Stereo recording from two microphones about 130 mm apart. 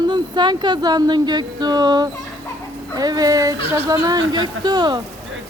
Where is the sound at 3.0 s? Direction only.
30° right (ahead or behind).